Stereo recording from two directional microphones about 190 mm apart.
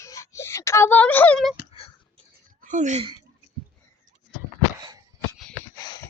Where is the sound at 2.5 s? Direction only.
40° right (ahead or behind).